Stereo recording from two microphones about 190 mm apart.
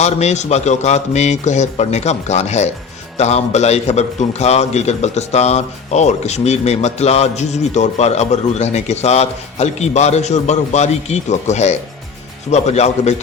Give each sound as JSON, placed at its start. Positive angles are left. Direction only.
{"t": 0.0, "sound": "a man's voice", "side_deg": 35}